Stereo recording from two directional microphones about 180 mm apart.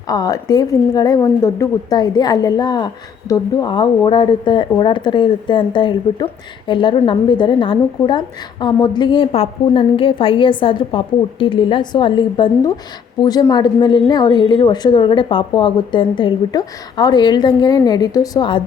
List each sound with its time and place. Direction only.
0.1 s a woman's voice: 20° left (ahead or behind)